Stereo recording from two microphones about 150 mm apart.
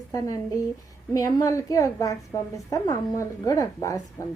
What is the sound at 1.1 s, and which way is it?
A woman's voice, 20° left (ahead or behind).